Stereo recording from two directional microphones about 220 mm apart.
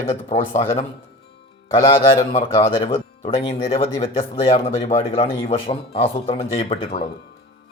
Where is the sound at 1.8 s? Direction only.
25° left (ahead or behind).